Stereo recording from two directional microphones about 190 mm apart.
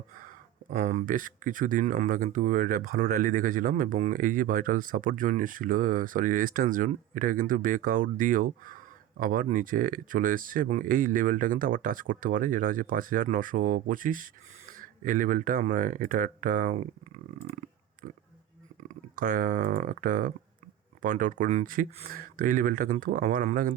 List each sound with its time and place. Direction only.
0.1 s speech: 45° right (ahead or behind)
17.6 s a sound: 40° right (ahead or behind)
18.8 s speech: 45° right (ahead or behind)